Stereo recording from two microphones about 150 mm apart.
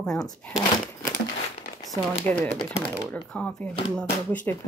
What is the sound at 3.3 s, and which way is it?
Speech, 5° left (ahead or behind).